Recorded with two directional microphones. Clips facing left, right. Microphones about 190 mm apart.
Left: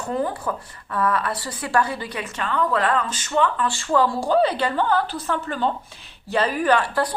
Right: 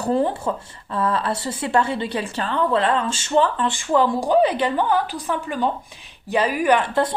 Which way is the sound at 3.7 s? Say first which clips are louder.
Right 2 dB; 20° right (ahead or behind).